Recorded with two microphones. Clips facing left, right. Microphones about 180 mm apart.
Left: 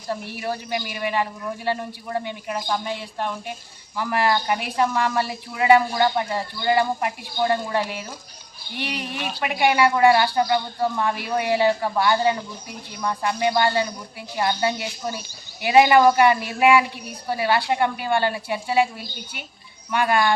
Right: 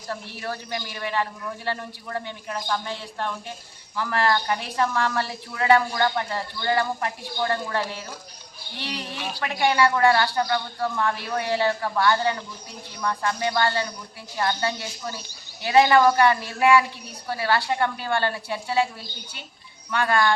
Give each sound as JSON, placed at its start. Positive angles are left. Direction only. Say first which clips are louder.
{"t": 0.1, "sound": "speech", "louder": "left 4 dB", "side_deg": 15}